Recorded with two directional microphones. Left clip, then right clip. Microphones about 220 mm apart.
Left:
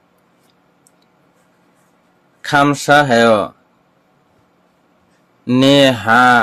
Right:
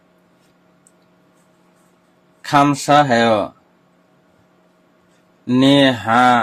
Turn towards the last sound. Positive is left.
turn(degrees=30)  # may be behind; listen again after turning